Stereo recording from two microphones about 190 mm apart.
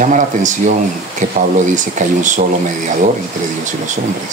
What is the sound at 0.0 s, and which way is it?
Speech, 40° right (ahead or behind).